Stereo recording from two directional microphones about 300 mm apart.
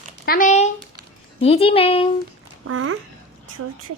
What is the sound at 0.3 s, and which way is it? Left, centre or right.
A woman's voice, left.